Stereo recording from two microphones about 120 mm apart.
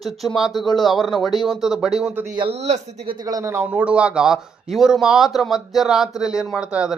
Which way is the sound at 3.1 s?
30° right (ahead or behind).